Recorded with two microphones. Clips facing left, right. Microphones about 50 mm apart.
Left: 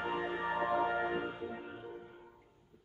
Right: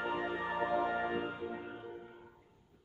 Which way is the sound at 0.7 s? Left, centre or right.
Left.